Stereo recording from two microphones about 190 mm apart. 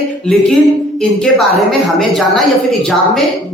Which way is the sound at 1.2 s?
Centre (ahead or behind).